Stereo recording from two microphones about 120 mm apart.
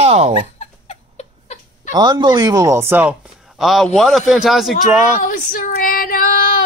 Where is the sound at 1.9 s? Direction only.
35° right (ahead or behind); by 3.1 s 20° right (ahead or behind).